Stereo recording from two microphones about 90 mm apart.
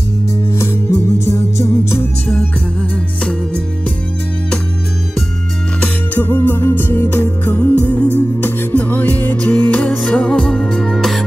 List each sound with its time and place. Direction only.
0.6 s music: 30° left (ahead or behind)
5.8 s music: 20° left (ahead or behind); by 11.2 s centre (ahead or behind)